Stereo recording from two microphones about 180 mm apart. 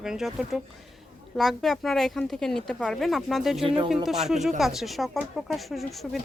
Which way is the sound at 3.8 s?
Centre (ahead or behind).